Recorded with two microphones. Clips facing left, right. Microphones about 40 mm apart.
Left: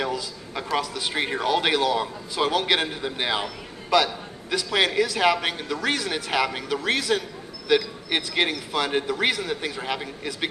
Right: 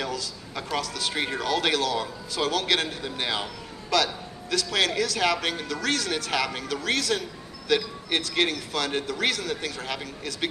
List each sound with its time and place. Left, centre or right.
0.0 s a man's voice: centre